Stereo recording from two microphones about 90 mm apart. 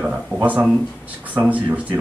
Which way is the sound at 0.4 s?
15° right (ahead or behind).